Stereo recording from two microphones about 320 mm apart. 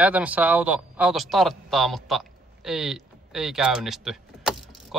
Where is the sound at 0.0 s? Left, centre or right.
Centre.